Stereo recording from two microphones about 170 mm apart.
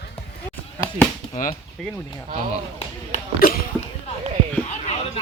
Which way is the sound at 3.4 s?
60° left (ahead or behind).